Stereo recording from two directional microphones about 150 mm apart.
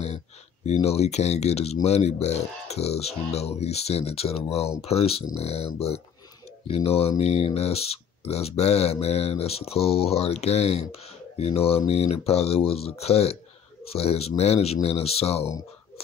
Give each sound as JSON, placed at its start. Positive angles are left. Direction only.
{"t": 0.7, "sound": "speech", "side_deg": 45}